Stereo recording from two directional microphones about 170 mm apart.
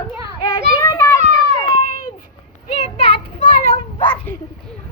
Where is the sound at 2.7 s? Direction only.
35° left (ahead or behind).